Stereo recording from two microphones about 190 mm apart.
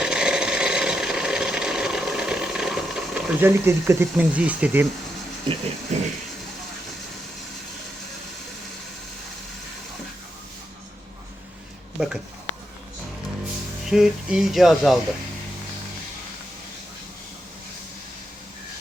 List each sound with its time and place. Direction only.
0.0 s a sound: 5° right (ahead or behind)
5.9 s speech: 35° right (ahead or behind)
11.9 s speech: centre (ahead or behind)
13.8 s speech: 5° right (ahead or behind)